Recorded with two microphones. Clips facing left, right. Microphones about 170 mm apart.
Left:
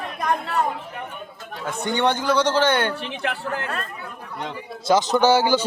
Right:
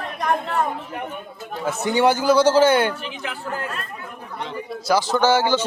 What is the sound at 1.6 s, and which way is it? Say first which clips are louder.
A man's voice: right 4 dB; 5° right (ahead or behind).